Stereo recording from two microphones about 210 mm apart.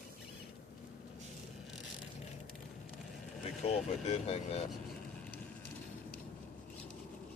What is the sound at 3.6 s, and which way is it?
Speech, 30° left (ahead or behind).